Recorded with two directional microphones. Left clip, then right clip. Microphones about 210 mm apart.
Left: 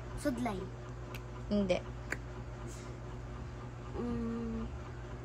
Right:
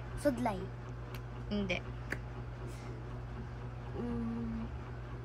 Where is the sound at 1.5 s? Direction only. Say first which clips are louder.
Left 4 dB; 15° left (ahead or behind).